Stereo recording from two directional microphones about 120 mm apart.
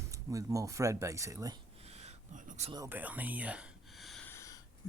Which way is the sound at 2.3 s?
65° right (ahead or behind).